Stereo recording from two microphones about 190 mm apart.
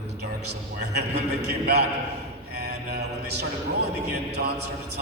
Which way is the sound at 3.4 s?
60° right (ahead or behind).